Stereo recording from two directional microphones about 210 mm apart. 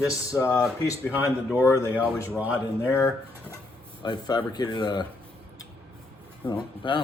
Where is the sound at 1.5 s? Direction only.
15° left (ahead or behind).